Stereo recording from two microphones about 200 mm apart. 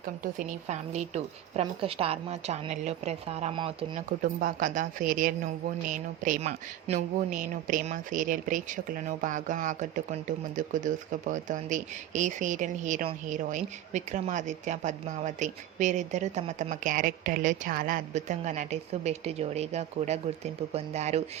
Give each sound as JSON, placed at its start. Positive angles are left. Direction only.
{"t": 0.0, "sound": "speech", "side_deg": -45}
{"t": 4.2, "sound": "a woman's voice", "side_deg": -45}